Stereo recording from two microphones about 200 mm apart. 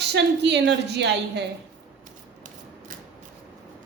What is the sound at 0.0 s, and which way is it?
A woman's voice, 60° right (ahead or behind).